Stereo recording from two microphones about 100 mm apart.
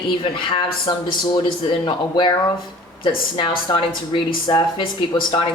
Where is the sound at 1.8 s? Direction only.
55° left (ahead or behind).